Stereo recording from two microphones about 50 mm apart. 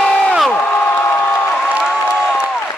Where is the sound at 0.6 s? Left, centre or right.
Left.